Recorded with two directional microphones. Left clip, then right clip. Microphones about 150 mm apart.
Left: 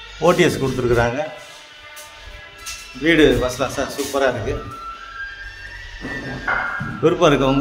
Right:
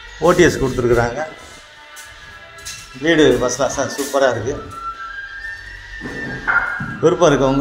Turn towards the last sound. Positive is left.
turn(degrees=5)  # may be behind; listen again after turning